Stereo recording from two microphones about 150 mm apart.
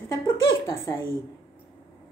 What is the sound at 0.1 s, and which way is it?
Speech, 15° left (ahead or behind).